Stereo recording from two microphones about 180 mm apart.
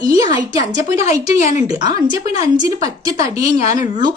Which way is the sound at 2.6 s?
20° right (ahead or behind).